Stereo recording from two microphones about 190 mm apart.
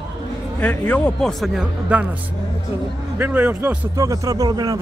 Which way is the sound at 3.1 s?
10° right (ahead or behind).